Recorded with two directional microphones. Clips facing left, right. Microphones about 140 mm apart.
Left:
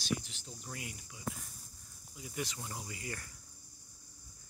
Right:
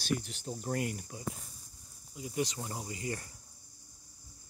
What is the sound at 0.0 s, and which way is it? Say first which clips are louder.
Speech: right 4 dB; 50° right (ahead or behind).